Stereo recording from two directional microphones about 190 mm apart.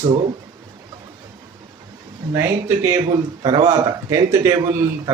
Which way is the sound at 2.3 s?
15° right (ahead or behind).